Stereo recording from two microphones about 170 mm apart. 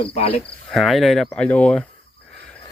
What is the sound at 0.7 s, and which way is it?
Speech, centre (ahead or behind).